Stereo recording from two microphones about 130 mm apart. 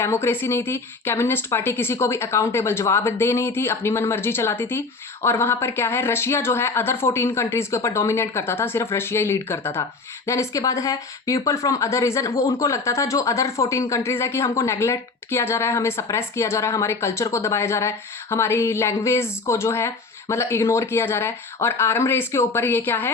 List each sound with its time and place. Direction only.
0.0 s speech: 20° left (ahead or behind)